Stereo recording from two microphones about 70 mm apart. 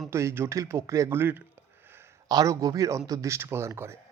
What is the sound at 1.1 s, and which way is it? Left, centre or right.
Speech, right.